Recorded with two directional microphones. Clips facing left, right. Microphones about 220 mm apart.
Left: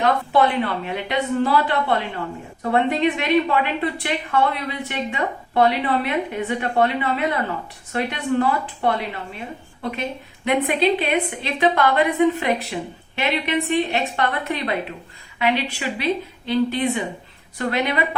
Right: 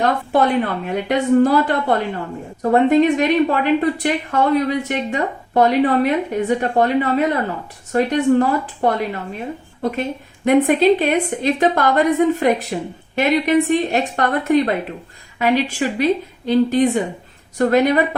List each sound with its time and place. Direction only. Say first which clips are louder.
0.0 s a woman's voice: right 1 dB; 45° right (ahead or behind)